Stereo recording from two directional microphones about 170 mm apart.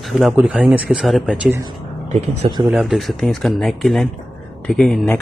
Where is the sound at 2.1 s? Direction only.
40° right (ahead or behind).